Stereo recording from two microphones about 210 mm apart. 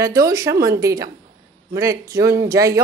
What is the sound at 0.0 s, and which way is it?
Speech, 15° right (ahead or behind).